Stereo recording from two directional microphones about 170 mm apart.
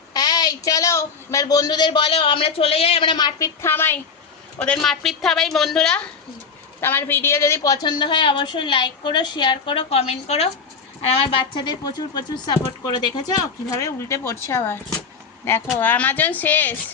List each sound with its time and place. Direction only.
0.1 s a woman's voice: 25° left (ahead or behind)
15.8 s speech: 10° left (ahead or behind)